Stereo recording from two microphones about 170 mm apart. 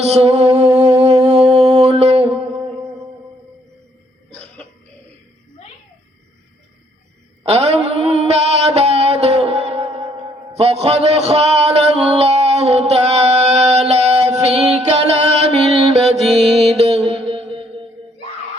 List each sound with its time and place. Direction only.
0.0 s mantra: 40° right (ahead or behind)
7.4 s mantra: 35° right (ahead or behind)
10.5 s a sound: 40° right (ahead or behind)
14.7 s music: 35° right (ahead or behind)
15.9 s mantra: 35° right (ahead or behind)
16.2 s music: centre (ahead or behind)
16.7 s a sound: 40° right (ahead or behind)